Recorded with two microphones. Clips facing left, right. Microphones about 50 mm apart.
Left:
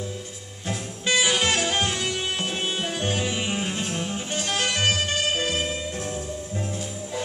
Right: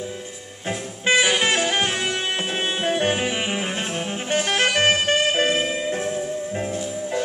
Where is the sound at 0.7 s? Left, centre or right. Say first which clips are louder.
Right 5 dB; right.